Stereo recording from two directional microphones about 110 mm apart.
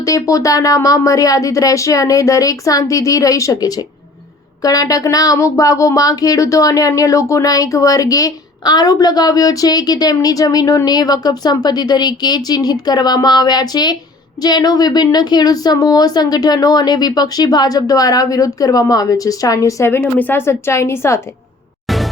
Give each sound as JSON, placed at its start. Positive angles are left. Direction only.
{"t": 0.0, "sound": "speech", "side_deg": 30}
{"t": 21.8, "sound": "music", "side_deg": 0}